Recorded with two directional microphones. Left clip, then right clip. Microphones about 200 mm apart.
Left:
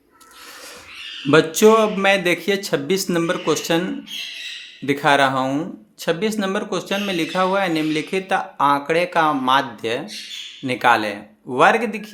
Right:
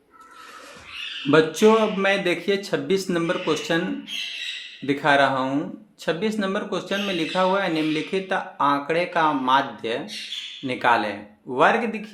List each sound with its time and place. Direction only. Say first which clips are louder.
1.3 s speech: left 3 dB; 35° left (ahead or behind)
4.9 s speech: left 3 dB; 35° left (ahead or behind)